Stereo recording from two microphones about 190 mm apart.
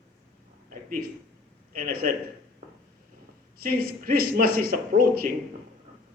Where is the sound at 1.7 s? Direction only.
50° right (ahead or behind).